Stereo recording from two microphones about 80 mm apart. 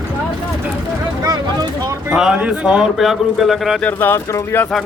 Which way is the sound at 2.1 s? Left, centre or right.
Centre.